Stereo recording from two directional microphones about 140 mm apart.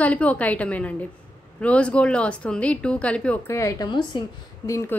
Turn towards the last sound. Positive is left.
turn(degrees=20)  # may be behind; listen again after turning